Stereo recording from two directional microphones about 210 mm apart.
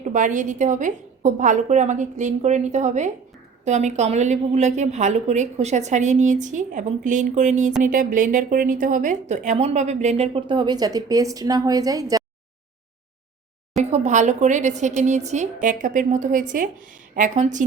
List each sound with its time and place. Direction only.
0.0 s speech: 35° right (ahead or behind); by 12.2 s 15° right (ahead or behind)
13.9 s speech: 35° right (ahead or behind)